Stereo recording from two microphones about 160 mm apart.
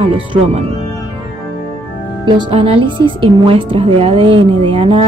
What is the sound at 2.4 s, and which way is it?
A woman's voice, 40° right (ahead or behind).